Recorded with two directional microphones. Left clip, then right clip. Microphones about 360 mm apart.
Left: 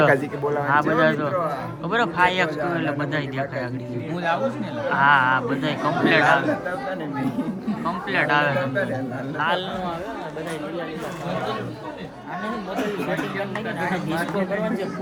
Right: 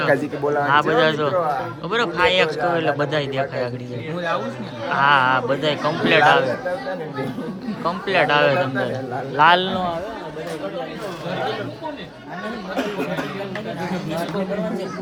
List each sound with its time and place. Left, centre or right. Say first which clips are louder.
0.0 s a man's voice: even; centre
4.9 s a man's voice: right 1 dB; centre
7.9 s a man's voice: right 4 dB; centre
9.4 s a man's voice: right 9 dB; right